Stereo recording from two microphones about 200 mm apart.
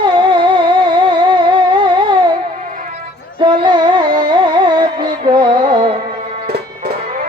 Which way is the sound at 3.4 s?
25° right (ahead or behind).